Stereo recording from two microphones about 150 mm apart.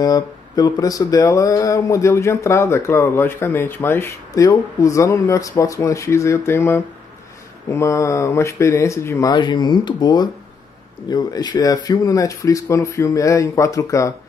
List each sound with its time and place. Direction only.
0.0 s speech: 25° left (ahead or behind)
9.3 s speech: 30° left (ahead or behind)